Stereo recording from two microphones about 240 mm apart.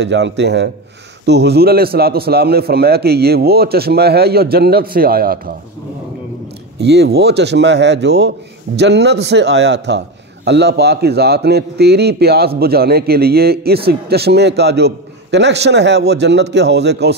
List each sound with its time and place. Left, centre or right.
0.0 s a man's voice: right
6.8 s a man's voice: right